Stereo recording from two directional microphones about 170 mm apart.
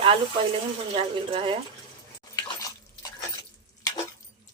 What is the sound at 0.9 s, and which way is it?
Speech, 35° right (ahead or behind).